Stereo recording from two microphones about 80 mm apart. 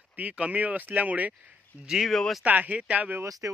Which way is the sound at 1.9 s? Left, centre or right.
Centre.